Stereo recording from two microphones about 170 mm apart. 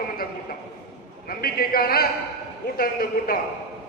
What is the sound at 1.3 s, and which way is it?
A man's voice, 60° left (ahead or behind).